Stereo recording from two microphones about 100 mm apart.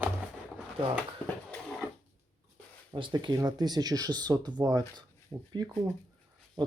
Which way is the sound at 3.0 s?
55° right (ahead or behind).